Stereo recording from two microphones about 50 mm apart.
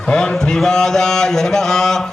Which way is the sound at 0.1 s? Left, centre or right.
Centre.